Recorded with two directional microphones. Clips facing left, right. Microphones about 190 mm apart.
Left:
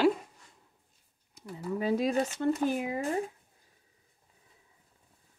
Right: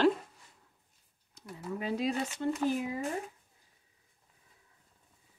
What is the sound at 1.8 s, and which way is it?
Speech, 45° left (ahead or behind).